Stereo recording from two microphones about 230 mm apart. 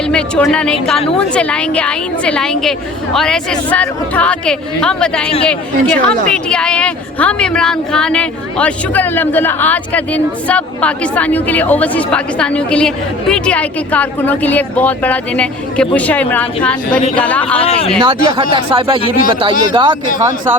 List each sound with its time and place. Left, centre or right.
0.1 s a woman's voice: centre
16.9 s speech: left
17.2 s speech: centre
17.6 s speech: left
18.0 s speech: centre